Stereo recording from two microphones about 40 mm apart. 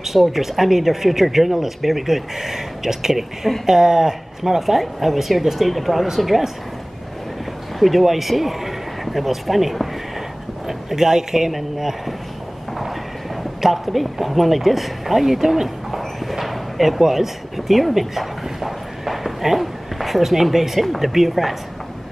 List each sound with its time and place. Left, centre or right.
0.0 s speech: centre
7.8 s speech: centre
13.4 s speech: centre
16.0 s a sound: centre
17.0 s speech: centre